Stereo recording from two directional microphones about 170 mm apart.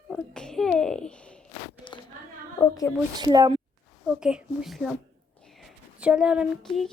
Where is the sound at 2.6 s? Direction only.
15° left (ahead or behind).